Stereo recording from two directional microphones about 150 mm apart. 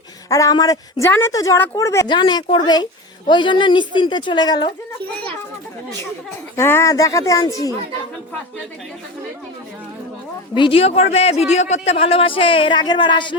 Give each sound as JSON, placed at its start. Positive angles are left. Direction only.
{"t": 0.3, "sound": "a woman's voice", "side_deg": 20}
{"t": 2.0, "sound": "a woman's voice", "side_deg": 30}
{"t": 6.6, "sound": "a woman's voice", "side_deg": 15}
{"t": 10.5, "sound": "speech", "side_deg": 35}